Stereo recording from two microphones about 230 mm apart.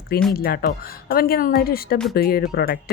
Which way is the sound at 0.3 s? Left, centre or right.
Left.